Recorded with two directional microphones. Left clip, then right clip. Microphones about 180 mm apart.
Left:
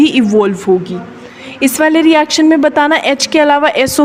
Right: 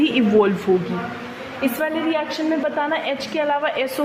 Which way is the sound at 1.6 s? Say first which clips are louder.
Left 12 dB; 55° left (ahead or behind).